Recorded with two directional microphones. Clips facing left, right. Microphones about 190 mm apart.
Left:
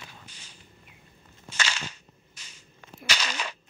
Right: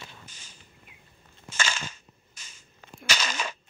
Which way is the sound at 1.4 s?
45° right (ahead or behind).